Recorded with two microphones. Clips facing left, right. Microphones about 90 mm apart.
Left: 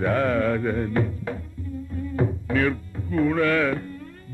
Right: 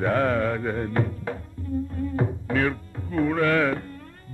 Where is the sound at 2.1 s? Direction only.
35° right (ahead or behind).